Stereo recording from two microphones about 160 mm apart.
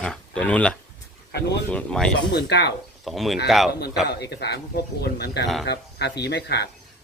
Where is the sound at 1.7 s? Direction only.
5° left (ahead or behind).